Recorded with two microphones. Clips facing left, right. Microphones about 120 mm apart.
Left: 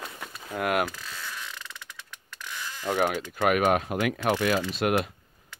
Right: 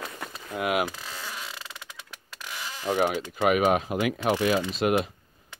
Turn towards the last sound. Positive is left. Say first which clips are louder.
# right 1 dB
turn(degrees=0)  # may be behind; listen again after turning